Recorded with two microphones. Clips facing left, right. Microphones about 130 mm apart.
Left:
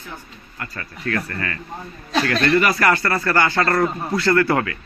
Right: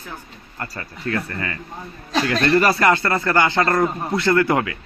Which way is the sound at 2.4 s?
30° right (ahead or behind).